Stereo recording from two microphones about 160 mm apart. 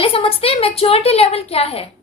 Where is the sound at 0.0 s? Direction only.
35° left (ahead or behind).